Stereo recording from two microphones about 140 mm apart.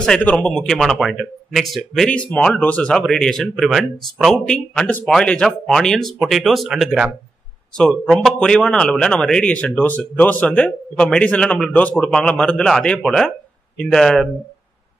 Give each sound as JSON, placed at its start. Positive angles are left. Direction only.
{"t": 0.0, "sound": "speech", "side_deg": 5}